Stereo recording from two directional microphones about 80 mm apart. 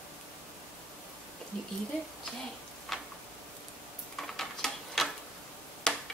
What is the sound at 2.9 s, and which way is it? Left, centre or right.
Tick-tock, centre.